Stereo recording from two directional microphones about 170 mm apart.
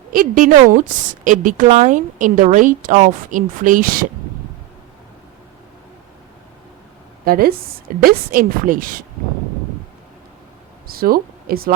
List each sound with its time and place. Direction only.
0.1 s a woman's voice: 55° right (ahead or behind)
7.3 s a woman's voice: 60° right (ahead or behind)
10.8 s speech: 60° right (ahead or behind)